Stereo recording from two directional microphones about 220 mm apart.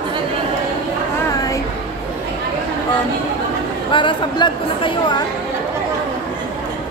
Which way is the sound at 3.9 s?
20° left (ahead or behind).